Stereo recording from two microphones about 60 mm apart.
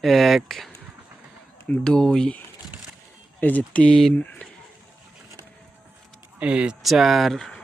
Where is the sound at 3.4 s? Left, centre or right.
Left.